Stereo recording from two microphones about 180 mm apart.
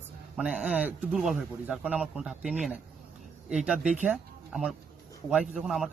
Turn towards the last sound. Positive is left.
turn(degrees=-5)  # may be behind; listen again after turning